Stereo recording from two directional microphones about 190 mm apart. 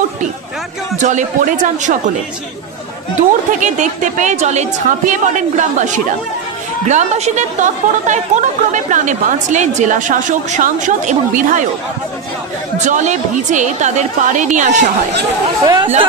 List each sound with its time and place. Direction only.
0.9 s speech: 40° right (ahead or behind)
3.2 s speech: 40° right (ahead or behind)
12.7 s speech: 40° right (ahead or behind)
15.6 s speech: 20° right (ahead or behind)